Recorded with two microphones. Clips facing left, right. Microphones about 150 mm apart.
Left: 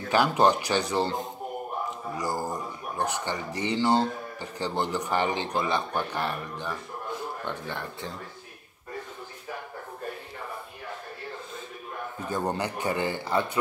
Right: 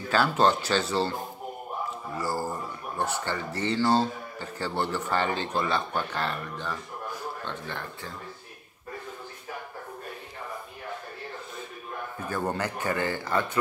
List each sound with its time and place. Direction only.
0.1 s speech: 15° left (ahead or behind)
12.3 s speech: 15° left (ahead or behind)